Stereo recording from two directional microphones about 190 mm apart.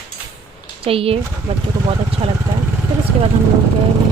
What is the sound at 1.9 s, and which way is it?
Vehicle, 30° right (ahead or behind).